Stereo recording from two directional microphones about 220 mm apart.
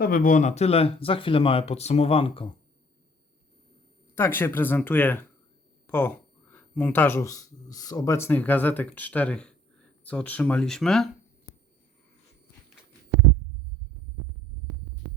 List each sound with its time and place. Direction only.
0.0 s speech: 40° left (ahead or behind)
4.4 s speech: 10° left (ahead or behind)